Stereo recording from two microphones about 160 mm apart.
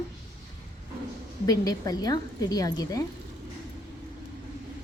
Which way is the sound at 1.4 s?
25° left (ahead or behind).